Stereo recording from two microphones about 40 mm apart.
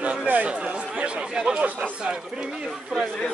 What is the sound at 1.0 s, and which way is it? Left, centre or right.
Speech, right.